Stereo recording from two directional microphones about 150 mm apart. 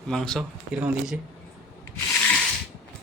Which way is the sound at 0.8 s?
10° right (ahead or behind).